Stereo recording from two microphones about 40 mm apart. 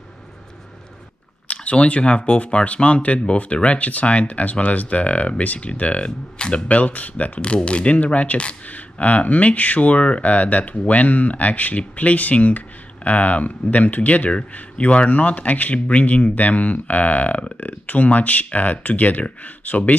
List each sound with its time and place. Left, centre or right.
1.5 s speech: left